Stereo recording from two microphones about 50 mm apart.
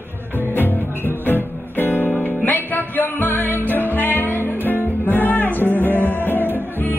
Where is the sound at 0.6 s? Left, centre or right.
Left.